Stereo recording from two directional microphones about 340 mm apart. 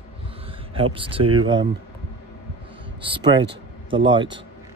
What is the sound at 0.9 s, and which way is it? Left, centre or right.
Speech, centre.